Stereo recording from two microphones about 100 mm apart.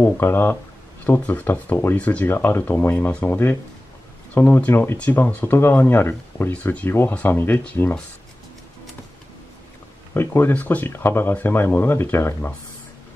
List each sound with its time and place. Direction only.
0.0 s speech: 20° left (ahead or behind)
10.1 s speech: 20° left (ahead or behind)